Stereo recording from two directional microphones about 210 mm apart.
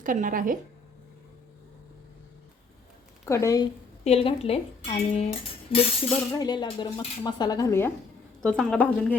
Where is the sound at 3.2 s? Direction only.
15° left (ahead or behind).